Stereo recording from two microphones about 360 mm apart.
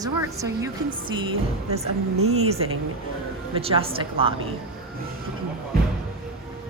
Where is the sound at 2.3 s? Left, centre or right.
Centre.